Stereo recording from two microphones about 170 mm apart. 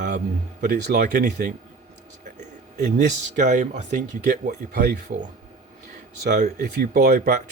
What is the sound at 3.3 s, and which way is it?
Speech, 45° right (ahead or behind).